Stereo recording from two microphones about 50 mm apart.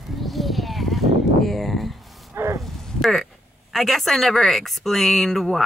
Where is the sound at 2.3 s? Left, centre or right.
Right.